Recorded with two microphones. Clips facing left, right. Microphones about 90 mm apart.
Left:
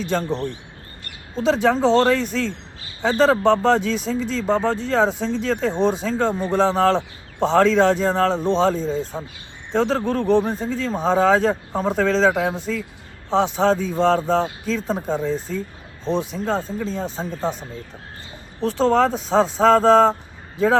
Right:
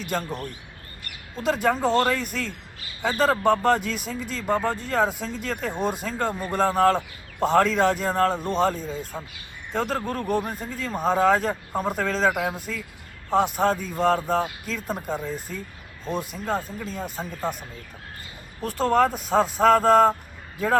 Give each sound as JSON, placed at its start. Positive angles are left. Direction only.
{"t": 0.1, "sound": "speech", "side_deg": -10}
{"t": 1.4, "sound": "speech", "side_deg": -5}
{"t": 8.8, "sound": "speech", "side_deg": 30}
{"t": 9.7, "sound": "speech", "side_deg": -5}
{"t": 18.6, "sound": "speech", "side_deg": -5}